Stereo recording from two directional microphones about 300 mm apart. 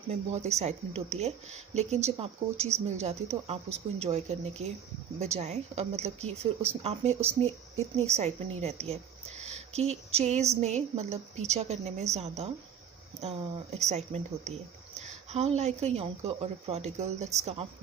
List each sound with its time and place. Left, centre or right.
0.1 s speech: right